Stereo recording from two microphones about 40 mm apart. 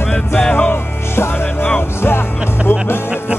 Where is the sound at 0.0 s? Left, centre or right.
Left.